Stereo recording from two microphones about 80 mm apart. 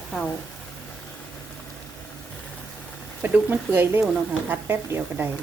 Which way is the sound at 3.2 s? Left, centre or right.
Right.